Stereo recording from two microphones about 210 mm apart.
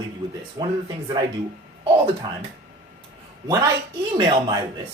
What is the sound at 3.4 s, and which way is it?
Speech, 15° right (ahead or behind).